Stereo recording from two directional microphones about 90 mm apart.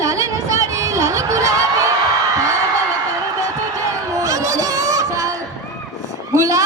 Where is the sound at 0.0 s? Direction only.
35° right (ahead or behind).